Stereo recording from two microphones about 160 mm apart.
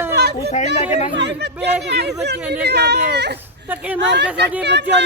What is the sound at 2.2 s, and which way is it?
Speech, 90° right.